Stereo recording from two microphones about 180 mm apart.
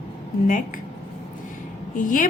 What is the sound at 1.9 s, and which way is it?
Speech, 50° left (ahead or behind).